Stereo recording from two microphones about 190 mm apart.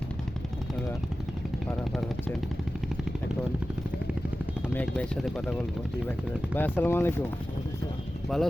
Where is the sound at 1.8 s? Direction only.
Centre (ahead or behind).